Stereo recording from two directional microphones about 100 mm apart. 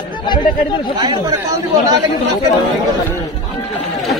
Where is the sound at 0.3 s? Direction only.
50° left (ahead or behind).